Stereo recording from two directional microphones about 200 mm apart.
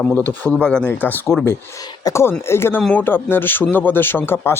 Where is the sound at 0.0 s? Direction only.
5° left (ahead or behind).